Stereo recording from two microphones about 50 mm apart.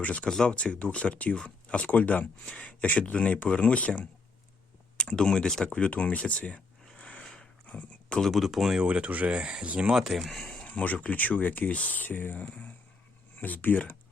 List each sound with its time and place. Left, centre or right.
0.0 s speech: left
0.3 s speech: centre
4.9 s speech: centre
6.8 s a sound: left
8.2 s speech: centre
8.8 s speech: right
9.9 s speech: centre
10.7 s speech: left